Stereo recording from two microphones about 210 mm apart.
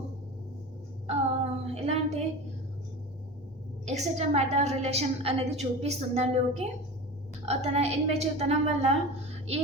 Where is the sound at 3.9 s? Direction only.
30° right (ahead or behind).